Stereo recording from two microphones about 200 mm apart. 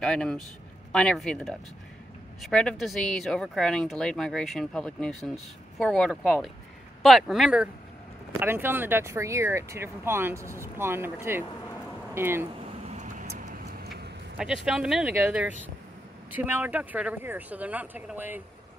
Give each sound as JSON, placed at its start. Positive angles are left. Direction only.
{"t": 0.0, "sound": "speech", "side_deg": 5}
{"t": 12.8, "sound": "vehicle", "side_deg": -35}
{"t": 14.4, "sound": "speech", "side_deg": 0}